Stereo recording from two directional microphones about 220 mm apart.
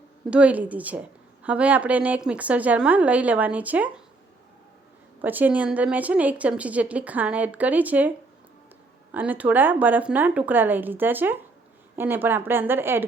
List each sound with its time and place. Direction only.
0.3 s a woman's voice: 5° right (ahead or behind)
5.2 s a woman's voice: 10° right (ahead or behind)
9.1 s a woman's voice: 5° right (ahead or behind)